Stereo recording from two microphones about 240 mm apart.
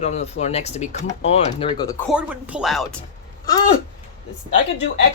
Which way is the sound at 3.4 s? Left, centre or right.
Centre.